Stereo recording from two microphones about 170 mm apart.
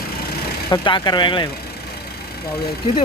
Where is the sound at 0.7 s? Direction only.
25° left (ahead or behind).